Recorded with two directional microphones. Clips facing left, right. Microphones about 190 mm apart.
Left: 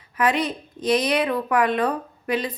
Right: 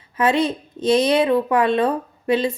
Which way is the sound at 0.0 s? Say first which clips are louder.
Right 4 dB; 25° right (ahead or behind).